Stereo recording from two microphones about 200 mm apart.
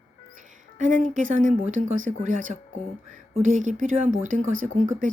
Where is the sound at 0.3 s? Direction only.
40° right (ahead or behind).